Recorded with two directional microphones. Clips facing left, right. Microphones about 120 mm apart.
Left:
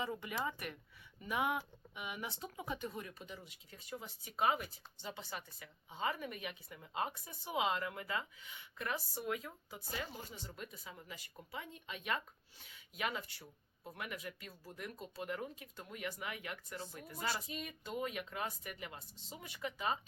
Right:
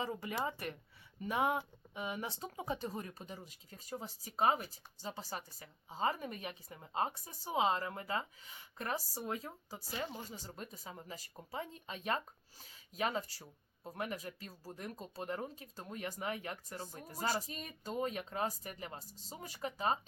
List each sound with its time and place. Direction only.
0.0 s speech: 30° right (ahead or behind)